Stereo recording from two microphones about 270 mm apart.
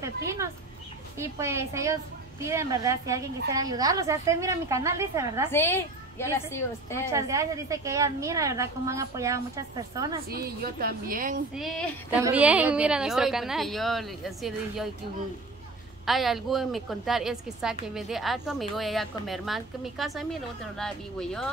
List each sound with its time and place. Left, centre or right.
0.0 s a woman's voice: centre
5.5 s a woman's voice: centre
7.1 s a woman's voice: centre
10.3 s a woman's voice: right
11.5 s a woman's voice: centre
16.1 s a woman's voice: centre